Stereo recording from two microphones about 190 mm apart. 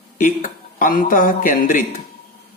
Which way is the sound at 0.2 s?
45° left (ahead or behind).